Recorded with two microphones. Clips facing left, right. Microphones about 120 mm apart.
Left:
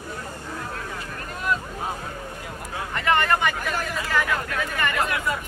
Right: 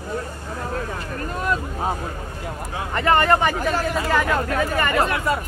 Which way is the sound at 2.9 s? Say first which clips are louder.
Right 4 dB; 35° right (ahead or behind).